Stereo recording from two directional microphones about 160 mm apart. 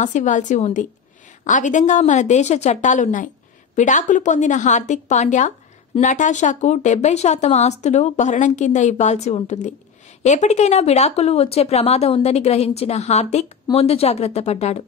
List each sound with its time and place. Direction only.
0.0 s speech: 50° left (ahead or behind)